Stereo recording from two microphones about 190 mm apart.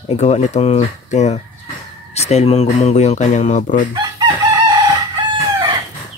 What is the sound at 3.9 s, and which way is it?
Chicken, 20° right (ahead or behind).